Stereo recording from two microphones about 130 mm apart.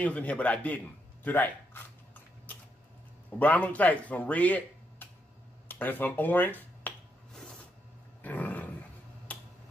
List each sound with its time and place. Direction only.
0.0 s a man's voice: 10° left (ahead or behind)
3.3 s speech: 10° left (ahead or behind)
8.2 s roar: 10° left (ahead or behind)
9.3 s finger snapping: 10° left (ahead or behind)